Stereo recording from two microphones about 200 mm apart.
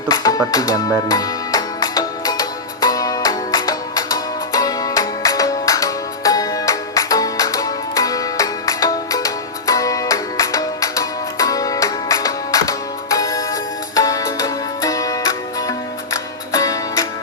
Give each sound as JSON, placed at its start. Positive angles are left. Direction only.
{"t": 0.1, "sound": "music", "side_deg": 20}